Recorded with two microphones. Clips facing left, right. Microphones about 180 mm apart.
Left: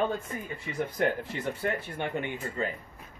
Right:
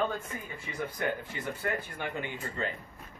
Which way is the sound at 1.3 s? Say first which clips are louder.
Left 3 dB; 30° left (ahead or behind).